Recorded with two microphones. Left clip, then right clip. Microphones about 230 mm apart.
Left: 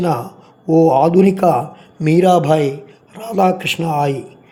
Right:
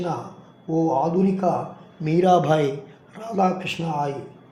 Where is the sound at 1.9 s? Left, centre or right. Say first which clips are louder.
Left 6 dB; left.